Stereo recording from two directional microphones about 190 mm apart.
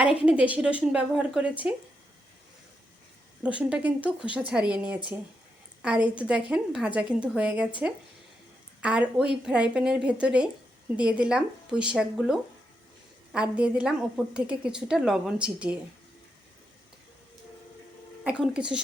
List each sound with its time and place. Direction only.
0.2 s a woman's voice: 5° right (ahead or behind)
3.6 s a woman's voice: 5° right (ahead or behind)
8.8 s a woman's voice: 5° right (ahead or behind)
18.2 s speech: 5° right (ahead or behind)